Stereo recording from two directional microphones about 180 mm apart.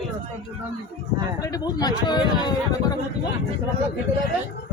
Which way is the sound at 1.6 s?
25° left (ahead or behind).